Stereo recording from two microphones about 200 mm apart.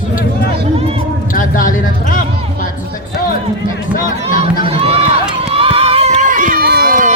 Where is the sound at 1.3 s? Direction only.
45° left (ahead or behind).